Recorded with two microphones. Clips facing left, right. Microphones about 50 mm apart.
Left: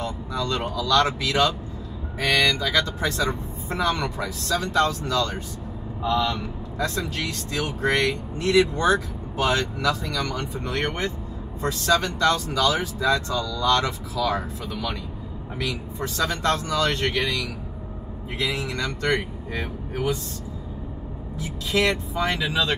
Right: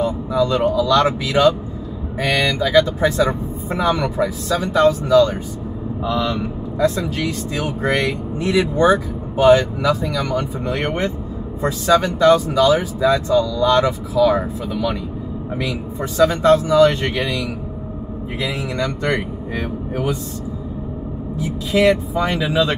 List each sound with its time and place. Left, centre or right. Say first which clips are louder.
0.0 s speech: right 10 dB; centre
21.4 s speech: right 6 dB; centre